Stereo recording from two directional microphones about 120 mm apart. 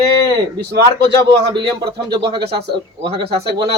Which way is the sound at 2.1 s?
40° right (ahead or behind).